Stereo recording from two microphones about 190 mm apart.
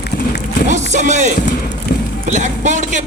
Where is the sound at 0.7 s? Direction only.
40° right (ahead or behind).